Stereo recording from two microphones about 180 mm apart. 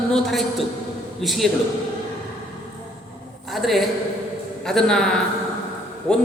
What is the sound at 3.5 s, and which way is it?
A man's voice, centre (ahead or behind).